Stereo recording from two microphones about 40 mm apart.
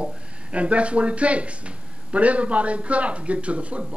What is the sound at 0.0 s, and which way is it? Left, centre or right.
A man's voice, right.